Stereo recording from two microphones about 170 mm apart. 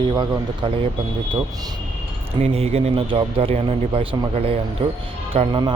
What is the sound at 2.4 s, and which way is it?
A man's voice, 40° right (ahead or behind).